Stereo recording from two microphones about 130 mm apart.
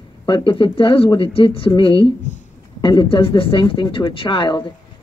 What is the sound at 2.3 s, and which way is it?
Speech, 65° left (ahead or behind).